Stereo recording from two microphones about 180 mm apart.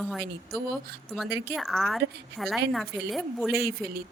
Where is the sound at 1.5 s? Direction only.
Centre (ahead or behind).